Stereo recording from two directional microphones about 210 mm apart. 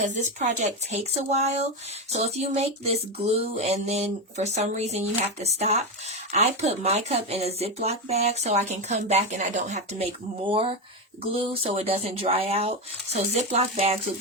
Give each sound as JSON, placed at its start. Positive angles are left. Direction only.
{"t": 0.0, "sound": "speech", "side_deg": -35}